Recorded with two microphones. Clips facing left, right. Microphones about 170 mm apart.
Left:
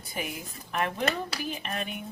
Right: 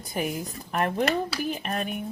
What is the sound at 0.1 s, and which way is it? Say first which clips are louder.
Speech: right 7 dB; 40° right (ahead or behind).